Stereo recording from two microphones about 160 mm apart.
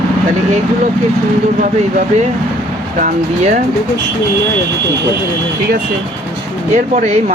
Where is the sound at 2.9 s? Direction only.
50° right (ahead or behind).